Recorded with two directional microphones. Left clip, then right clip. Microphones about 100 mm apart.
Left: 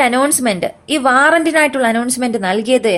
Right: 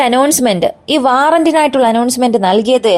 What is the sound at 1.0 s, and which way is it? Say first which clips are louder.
Speech: right 1 dB; 60° right (ahead or behind).